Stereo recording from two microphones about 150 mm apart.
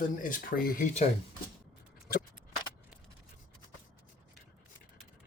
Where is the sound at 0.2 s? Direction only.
70° left (ahead or behind).